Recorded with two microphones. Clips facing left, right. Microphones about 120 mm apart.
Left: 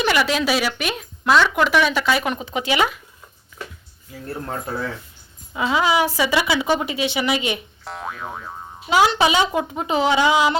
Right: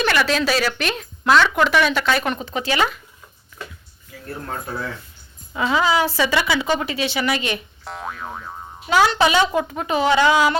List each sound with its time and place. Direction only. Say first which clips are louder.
0.0 s a woman's voice: even; 15° left (ahead or behind)
5.5 s a woman's voice: even; 5° left (ahead or behind)
7.9 s boing: even; centre (ahead or behind)
8.9 s a woman's voice: even; 15° left (ahead or behind)